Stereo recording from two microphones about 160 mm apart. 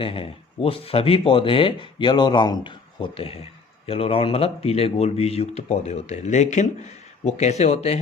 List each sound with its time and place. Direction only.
0.0 s speech: 35° left (ahead or behind)